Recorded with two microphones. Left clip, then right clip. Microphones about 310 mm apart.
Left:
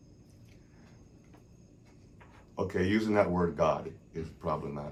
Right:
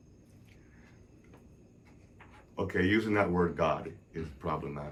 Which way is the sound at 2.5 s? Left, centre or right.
Centre.